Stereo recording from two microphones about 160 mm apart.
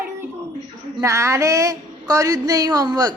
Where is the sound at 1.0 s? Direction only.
20° right (ahead or behind).